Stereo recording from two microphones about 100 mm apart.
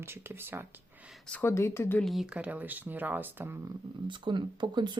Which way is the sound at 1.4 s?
25° left (ahead or behind).